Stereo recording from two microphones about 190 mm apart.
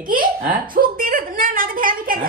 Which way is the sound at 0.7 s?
50° right (ahead or behind).